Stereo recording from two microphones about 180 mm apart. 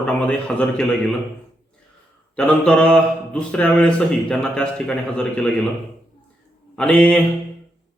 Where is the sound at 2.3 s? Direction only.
5° left (ahead or behind).